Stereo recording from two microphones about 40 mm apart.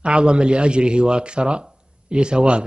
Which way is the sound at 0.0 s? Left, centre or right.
Right.